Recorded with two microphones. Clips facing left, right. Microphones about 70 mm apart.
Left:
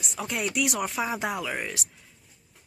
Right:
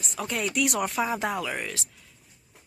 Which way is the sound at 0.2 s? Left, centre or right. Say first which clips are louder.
Right 1 dB; centre.